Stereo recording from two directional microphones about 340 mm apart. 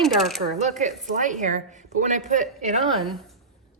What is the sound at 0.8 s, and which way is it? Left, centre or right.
A woman's voice, right.